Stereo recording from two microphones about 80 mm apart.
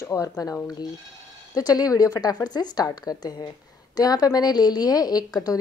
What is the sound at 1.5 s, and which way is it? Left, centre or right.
A woman's voice, left.